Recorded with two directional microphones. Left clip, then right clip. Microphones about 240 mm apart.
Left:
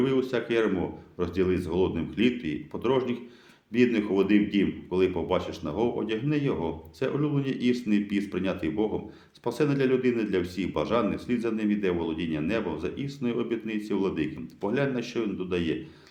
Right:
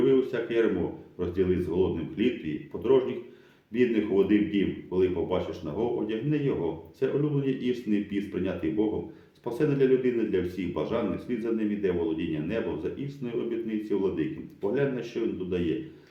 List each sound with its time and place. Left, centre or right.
0.0 s speech: left